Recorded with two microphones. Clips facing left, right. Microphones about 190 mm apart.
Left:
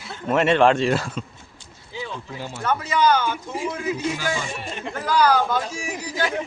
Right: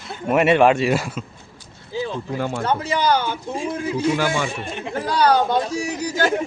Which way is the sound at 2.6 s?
30° right (ahead or behind).